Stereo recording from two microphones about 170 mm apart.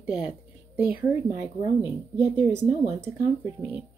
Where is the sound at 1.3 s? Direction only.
15° right (ahead or behind).